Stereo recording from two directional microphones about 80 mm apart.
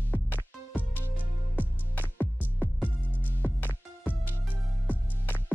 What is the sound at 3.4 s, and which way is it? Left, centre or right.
Music, left.